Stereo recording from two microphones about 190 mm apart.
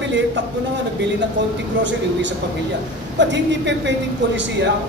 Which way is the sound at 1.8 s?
70° right (ahead or behind).